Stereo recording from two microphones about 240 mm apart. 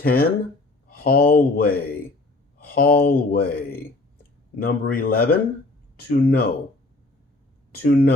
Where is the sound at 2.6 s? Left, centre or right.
Left.